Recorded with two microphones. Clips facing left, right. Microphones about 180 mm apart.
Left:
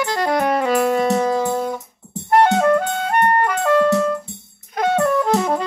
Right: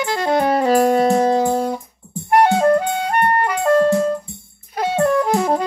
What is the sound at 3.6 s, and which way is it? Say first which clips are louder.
Music: right 2 dB; 40° right (ahead or behind).